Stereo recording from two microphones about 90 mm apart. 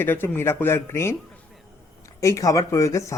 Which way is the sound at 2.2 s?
35° left (ahead or behind).